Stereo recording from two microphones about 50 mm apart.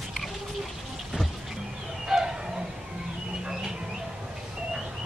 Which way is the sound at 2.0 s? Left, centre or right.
Centre.